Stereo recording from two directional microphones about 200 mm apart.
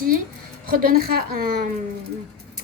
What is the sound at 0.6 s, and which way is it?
Speech, 45° right (ahead or behind).